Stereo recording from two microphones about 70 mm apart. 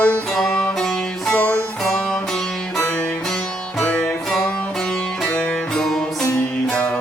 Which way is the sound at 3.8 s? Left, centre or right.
Centre.